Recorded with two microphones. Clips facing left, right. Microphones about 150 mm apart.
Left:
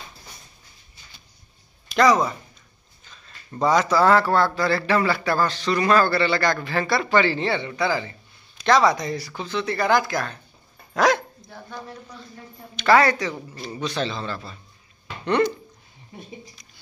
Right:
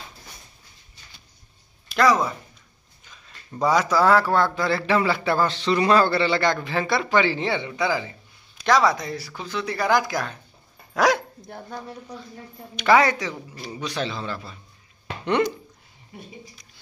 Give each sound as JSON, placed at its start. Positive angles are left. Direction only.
{"t": 1.9, "sound": "a man's voice", "side_deg": -5}
{"t": 12.7, "sound": "a man's voice", "side_deg": -15}